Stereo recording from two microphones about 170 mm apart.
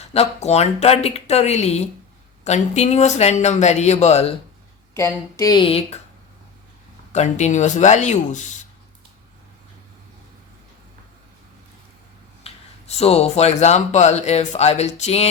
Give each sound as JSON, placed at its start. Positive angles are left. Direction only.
{"t": 0.0, "sound": "speech", "side_deg": 40}
{"t": 4.9, "sound": "speech", "side_deg": 20}
{"t": 7.1, "sound": "speech", "side_deg": 45}
{"t": 12.4, "sound": "a sound", "side_deg": 35}
{"t": 13.0, "sound": "speech", "side_deg": 40}